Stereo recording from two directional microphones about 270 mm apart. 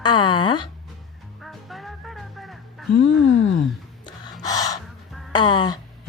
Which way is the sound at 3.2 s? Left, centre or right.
Left.